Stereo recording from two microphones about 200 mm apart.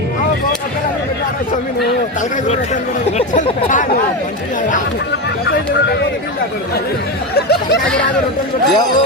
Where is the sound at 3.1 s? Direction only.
40° left (ahead or behind).